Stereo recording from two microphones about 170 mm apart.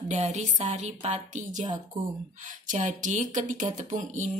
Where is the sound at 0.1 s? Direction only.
40° right (ahead or behind).